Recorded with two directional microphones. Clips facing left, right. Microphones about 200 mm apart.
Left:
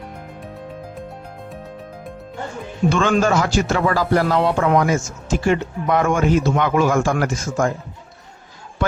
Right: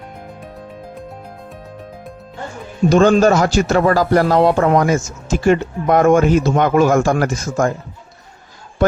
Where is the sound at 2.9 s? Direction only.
40° right (ahead or behind).